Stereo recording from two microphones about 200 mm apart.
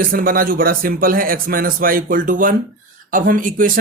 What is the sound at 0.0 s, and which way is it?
Speech, 45° right (ahead or behind).